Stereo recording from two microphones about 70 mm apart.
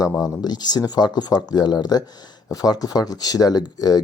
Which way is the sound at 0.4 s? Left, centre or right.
Left.